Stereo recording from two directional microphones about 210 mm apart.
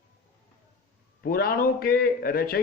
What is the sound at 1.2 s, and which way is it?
A man's voice, 45° left (ahead or behind).